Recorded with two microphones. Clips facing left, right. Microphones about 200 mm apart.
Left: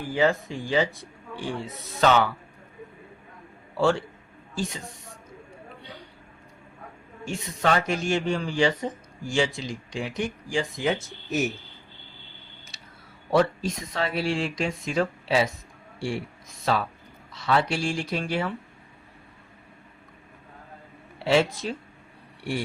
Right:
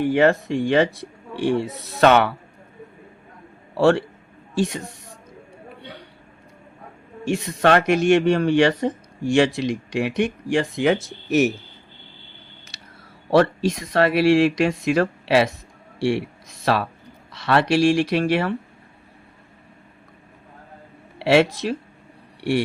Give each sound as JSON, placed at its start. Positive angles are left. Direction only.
{"t": 0.0, "sound": "speech", "side_deg": -70}
{"t": 3.8, "sound": "speech", "side_deg": -70}
{"t": 7.3, "sound": "speech", "side_deg": -70}
{"t": 13.3, "sound": "speech", "side_deg": -75}
{"t": 21.2, "sound": "speech", "side_deg": -75}